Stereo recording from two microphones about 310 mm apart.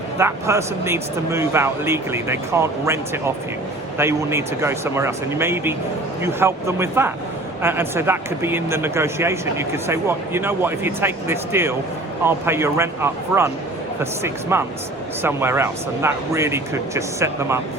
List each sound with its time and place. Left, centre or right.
0.2 s speech: centre
14.5 s speech: centre